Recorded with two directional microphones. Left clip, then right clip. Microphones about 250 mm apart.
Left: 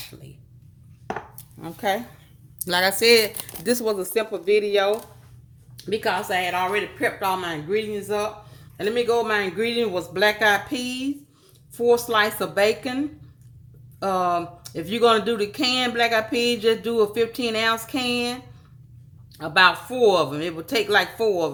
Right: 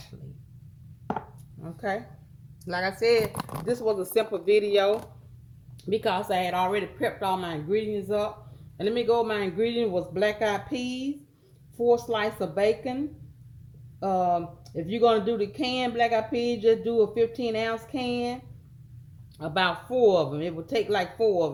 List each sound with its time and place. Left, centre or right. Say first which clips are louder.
1.6 s speech: left 6 dB; left
4.2 s a man's voice: left 2 dB; centre
14.0 s speech: left 3 dB; centre
19.4 s speech: left 9 dB; centre